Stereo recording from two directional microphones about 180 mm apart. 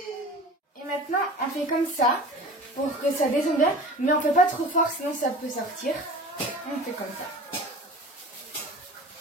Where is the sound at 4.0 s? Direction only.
45° left (ahead or behind).